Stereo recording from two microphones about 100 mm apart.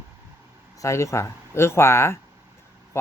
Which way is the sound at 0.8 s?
30° left (ahead or behind).